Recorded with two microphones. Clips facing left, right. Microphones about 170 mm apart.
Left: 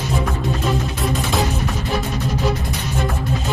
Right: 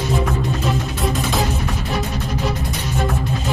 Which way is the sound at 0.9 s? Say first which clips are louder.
Even; centre (ahead or behind).